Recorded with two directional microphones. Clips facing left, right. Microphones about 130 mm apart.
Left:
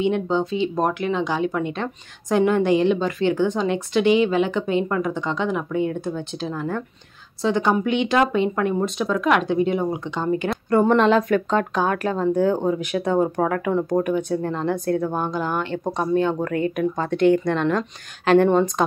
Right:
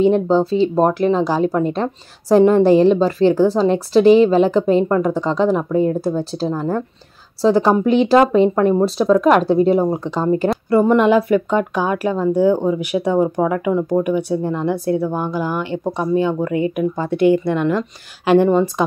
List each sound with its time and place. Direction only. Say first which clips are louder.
0.0 s speech: right 7 dB; 35° right (ahead or behind)
10.5 s speech: right 2 dB; 5° right (ahead or behind)